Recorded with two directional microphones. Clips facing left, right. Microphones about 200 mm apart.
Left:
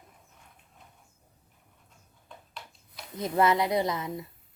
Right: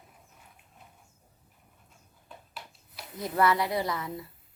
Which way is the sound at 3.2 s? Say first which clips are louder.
Left 2 dB; 20° left (ahead or behind).